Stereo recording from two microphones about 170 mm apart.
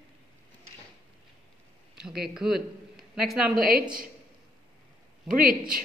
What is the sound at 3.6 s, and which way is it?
Speech, 60° right (ahead or behind).